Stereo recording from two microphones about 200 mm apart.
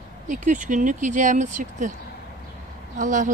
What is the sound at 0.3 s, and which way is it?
Speech, 40° right (ahead or behind).